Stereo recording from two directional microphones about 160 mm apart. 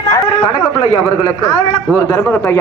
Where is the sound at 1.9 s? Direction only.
15° left (ahead or behind).